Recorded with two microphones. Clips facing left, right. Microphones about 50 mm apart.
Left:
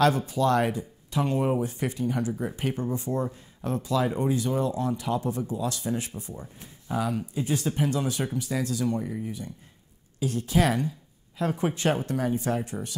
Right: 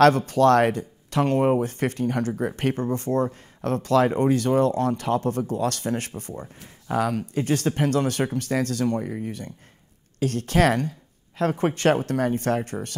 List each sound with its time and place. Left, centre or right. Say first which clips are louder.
0.3 s speech: right 6 dB; right